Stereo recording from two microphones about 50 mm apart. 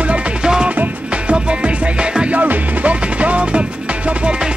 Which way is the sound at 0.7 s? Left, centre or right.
Right.